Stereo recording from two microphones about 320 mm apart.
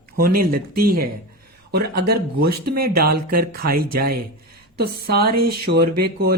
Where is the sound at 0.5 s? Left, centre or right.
Right.